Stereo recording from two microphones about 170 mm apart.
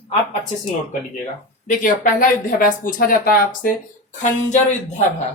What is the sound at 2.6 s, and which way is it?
Speech, 60° left (ahead or behind).